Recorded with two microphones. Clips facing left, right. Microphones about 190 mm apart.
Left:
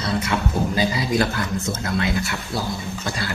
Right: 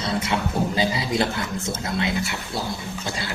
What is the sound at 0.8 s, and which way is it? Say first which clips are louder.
Speech: left 3 dB; 25° right (ahead or behind).